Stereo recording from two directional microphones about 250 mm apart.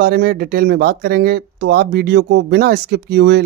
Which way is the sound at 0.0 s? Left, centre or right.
Right.